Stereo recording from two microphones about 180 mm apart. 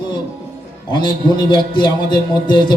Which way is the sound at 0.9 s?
25° left (ahead or behind).